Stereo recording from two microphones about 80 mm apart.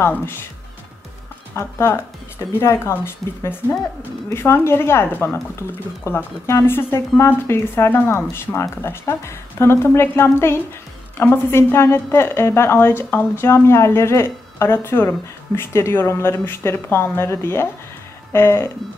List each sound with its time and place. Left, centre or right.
0.0 s speech: left
1.5 s a woman's voice: left